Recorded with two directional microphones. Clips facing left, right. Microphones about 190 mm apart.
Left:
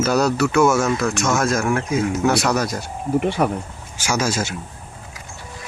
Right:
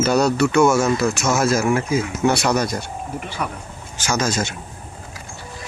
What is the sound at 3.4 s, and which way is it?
Speech, 45° left (ahead or behind).